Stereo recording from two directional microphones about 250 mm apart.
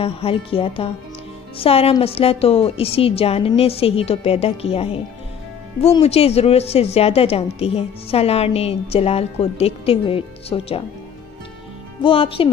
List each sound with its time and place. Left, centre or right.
0.0 s speech: left
12.0 s speech: left